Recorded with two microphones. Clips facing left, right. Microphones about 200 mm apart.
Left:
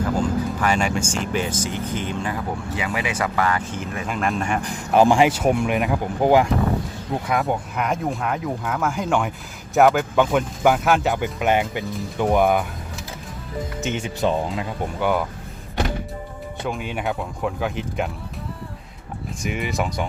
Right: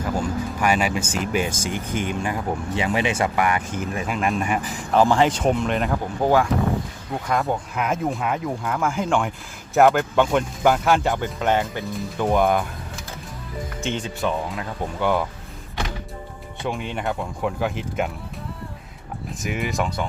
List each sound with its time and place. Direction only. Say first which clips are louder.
0.2 s vehicle: left 2 dB; 10° right (ahead or behind)
1.1 s speech: even; 10° right (ahead or behind)
2.7 s speech: right 4 dB; 30° right (ahead or behind)
3.3 s speech: even; 15° right (ahead or behind)
4.0 s speech: left 1 dB; 5° right (ahead or behind)
4.9 s speech: left 2 dB; 15° left (ahead or behind)
7.3 s speech: even; centre (ahead or behind)
13.8 s speech: even; 10° left (ahead or behind)
14.2 s speech: left 6 dB; 30° left (ahead or behind)
14.9 s speech: even; 5° left (ahead or behind)
16.6 s speech: even; 5° left (ahead or behind)
19.4 s speech: even; centre (ahead or behind)